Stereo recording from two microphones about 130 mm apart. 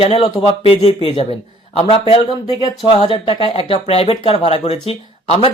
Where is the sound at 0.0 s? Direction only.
50° left (ahead or behind).